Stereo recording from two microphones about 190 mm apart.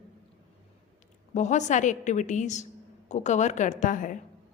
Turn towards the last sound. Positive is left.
turn(degrees=45)  # may be behind; listen again after turning